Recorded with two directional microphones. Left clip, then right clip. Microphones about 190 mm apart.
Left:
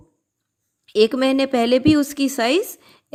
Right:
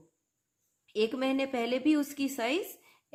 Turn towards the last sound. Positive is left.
turn(degrees=35)  # may be behind; listen again after turning